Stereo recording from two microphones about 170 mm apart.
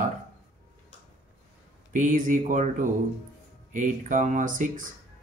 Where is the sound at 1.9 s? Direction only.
50° right (ahead or behind).